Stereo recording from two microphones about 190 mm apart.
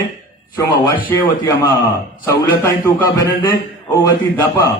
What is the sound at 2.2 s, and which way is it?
A man's voice, 15° left (ahead or behind).